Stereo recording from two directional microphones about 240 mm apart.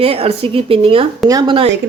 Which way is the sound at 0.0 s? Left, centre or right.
Right.